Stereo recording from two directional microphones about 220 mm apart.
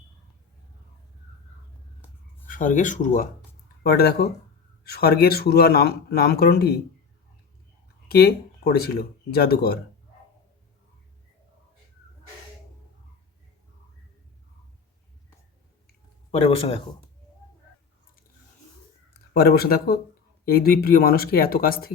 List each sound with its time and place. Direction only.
2.5 s speech: 35° left (ahead or behind)
8.0 s speech: 45° left (ahead or behind)
16.3 s speech: 25° left (ahead or behind)
19.3 s speech: 45° left (ahead or behind)